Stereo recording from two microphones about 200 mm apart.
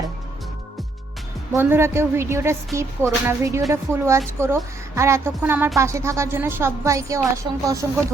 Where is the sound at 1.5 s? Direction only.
15° right (ahead or behind).